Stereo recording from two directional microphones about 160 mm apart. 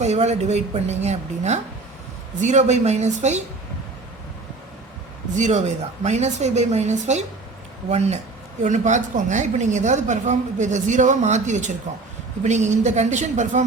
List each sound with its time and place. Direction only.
0.0 s a woman's voice: 45° right (ahead or behind)
5.3 s a woman's voice: 50° right (ahead or behind)